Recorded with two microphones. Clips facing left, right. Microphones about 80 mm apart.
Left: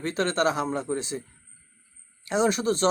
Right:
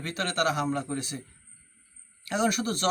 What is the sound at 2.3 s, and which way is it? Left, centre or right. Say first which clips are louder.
Speech: left 4 dB; left.